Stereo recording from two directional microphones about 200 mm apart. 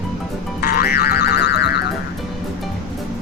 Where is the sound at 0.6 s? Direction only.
50° left (ahead or behind).